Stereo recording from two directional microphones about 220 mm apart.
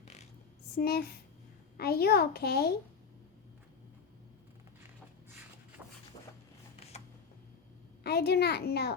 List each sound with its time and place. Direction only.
0.0 s a sound: 30° left (ahead or behind)
0.8 s a child's voice: 45° left (ahead or behind)
8.0 s a child's voice: 45° left (ahead or behind)